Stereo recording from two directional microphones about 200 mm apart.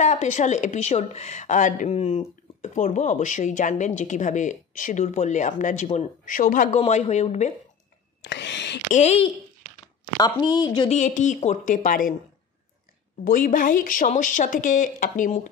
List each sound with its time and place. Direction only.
0.0 s speech: 35° left (ahead or behind)
8.2 s a sound: 60° left (ahead or behind)
8.9 s speech: 35° left (ahead or behind)
10.1 s a woman's voice: 20° left (ahead or behind)
10.9 s speech: 35° left (ahead or behind)
13.2 s speech: 45° left (ahead or behind)